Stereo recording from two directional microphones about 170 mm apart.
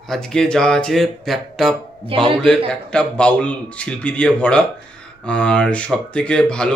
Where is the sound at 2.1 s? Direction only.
30° right (ahead or behind).